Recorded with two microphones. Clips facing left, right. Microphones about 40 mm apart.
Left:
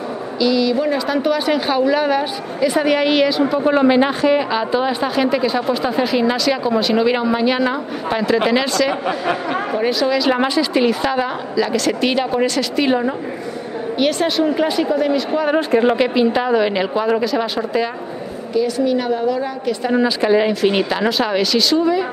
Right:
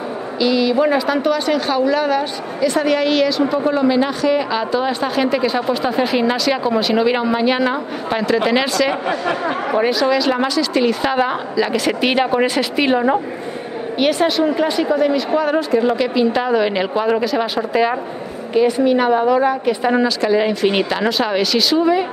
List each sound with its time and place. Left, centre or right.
0.4 s a woman's voice: centre
1.0 s a woman's voice: centre
3.7 s a man's voice: left
4.4 s speech: centre
10.3 s a woman's voice: centre
11.0 s a woman's voice: centre
15.7 s a woman's voice: left
16.0 s a woman's voice: centre
16.4 s speech: centre
18.5 s a woman's voice: right
20.3 s speech: centre